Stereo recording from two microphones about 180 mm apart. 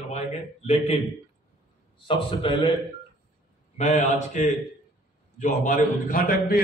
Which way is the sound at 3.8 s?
40° left (ahead or behind).